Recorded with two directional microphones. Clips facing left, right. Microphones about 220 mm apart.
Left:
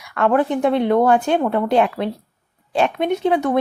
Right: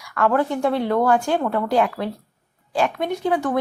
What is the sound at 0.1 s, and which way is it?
Speech, 20° left (ahead or behind).